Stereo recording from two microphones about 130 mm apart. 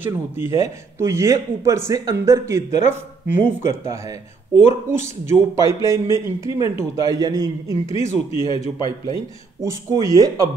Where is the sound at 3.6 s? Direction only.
20° right (ahead or behind).